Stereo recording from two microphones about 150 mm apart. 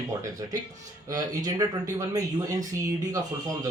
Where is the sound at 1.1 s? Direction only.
25° right (ahead or behind).